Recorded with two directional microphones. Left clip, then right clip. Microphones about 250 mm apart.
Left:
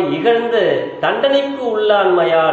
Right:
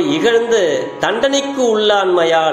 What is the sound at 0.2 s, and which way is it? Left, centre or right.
A man's voice, right.